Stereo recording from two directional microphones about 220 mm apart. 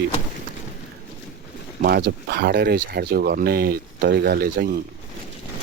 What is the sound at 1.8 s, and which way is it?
Speech, 45° right (ahead or behind).